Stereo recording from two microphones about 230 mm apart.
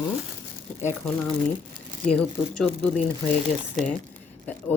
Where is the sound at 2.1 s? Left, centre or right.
Centre.